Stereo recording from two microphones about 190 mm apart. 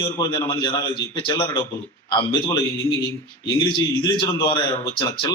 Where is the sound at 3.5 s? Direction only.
25° left (ahead or behind).